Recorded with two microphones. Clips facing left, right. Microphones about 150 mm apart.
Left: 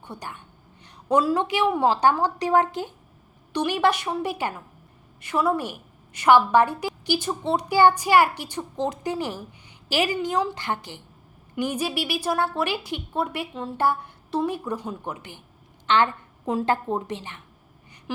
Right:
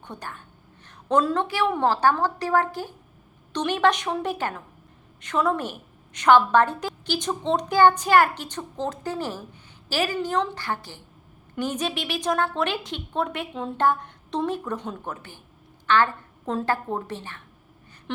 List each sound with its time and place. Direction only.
0.0 s a woman's voice: 10° left (ahead or behind)